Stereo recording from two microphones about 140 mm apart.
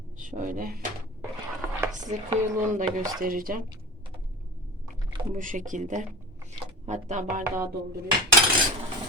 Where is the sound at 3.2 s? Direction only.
80° right.